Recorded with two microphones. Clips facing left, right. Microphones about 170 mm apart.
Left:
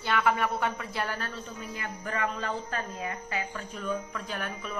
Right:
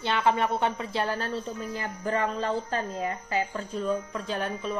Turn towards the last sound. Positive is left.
turn(degrees=-25)  # may be behind; listen again after turning